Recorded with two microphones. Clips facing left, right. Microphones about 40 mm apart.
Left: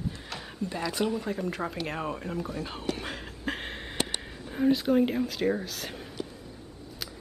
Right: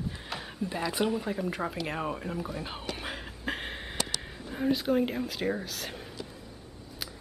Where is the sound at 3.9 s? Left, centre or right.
Left.